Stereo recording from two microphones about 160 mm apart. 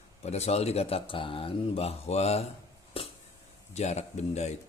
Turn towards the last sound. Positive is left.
turn(degrees=45)  # may be behind; listen again after turning